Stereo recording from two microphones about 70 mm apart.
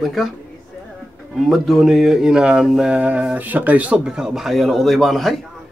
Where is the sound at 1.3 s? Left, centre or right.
Centre.